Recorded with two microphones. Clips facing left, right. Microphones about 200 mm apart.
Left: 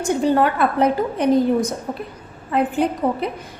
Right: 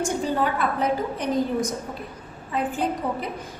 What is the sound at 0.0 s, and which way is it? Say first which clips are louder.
A woman's voice: left 6 dB; 65° left (ahead or behind).